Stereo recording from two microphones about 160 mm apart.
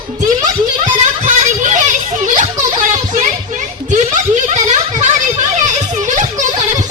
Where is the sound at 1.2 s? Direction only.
50° right (ahead or behind).